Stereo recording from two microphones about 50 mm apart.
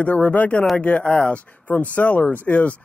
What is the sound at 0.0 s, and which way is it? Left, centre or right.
Speech, left.